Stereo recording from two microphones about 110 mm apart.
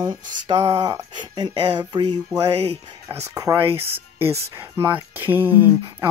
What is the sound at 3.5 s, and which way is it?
Speech, 20° right (ahead or behind).